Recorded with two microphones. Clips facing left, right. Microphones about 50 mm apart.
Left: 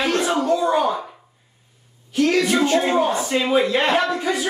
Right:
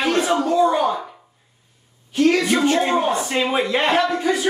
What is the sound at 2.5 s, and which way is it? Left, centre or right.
Speech, centre.